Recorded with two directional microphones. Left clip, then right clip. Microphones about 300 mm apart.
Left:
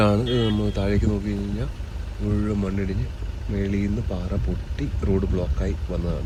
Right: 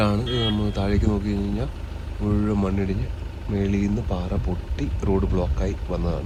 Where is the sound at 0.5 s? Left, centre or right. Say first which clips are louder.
Left 1 dB; centre.